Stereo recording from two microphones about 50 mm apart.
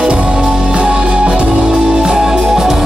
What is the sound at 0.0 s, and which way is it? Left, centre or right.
Music, right.